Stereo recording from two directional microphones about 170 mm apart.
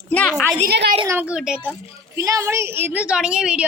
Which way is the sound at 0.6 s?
75° right (ahead or behind).